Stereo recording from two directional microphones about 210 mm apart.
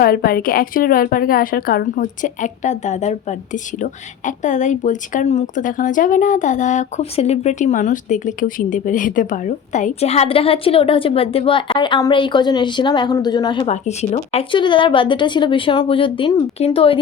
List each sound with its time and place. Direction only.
0.0 s a woman's voice: 45° left (ahead or behind); by 17.0 s 25° left (ahead or behind)